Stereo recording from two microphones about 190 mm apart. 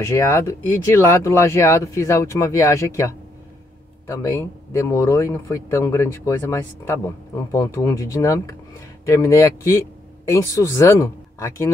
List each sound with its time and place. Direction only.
0.1 s a man's voice: 15° left (ahead or behind)